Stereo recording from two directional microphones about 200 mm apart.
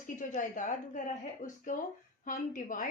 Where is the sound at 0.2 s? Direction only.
40° left (ahead or behind).